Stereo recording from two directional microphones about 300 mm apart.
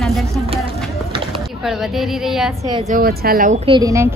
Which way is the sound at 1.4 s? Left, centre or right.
Centre.